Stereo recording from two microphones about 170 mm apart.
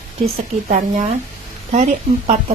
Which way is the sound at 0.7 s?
45° right (ahead or behind).